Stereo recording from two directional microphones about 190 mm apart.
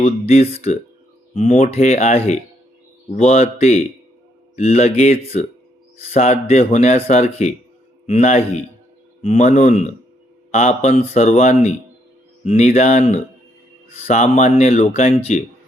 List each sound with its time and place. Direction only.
0.0 s speech: 35° left (ahead or behind)